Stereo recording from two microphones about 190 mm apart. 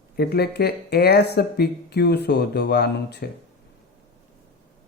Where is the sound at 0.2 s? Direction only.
55° left (ahead or behind).